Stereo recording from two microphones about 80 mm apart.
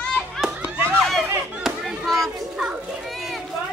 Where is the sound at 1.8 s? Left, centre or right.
Centre.